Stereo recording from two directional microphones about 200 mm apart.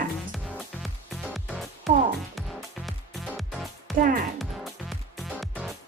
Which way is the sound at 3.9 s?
45° right (ahead or behind).